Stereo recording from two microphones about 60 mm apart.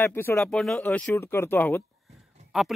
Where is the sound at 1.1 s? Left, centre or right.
Left.